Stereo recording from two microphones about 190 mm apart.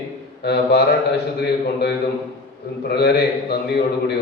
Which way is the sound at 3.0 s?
60° left (ahead or behind).